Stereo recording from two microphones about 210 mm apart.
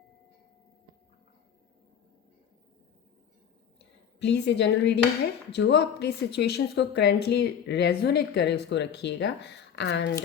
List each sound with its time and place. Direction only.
4.2 s a woman's voice: 55° left (ahead or behind)